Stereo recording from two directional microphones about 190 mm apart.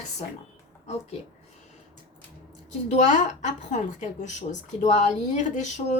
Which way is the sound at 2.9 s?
40° left (ahead or behind).